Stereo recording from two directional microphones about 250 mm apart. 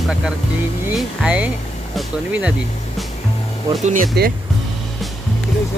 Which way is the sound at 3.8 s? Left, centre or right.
Right.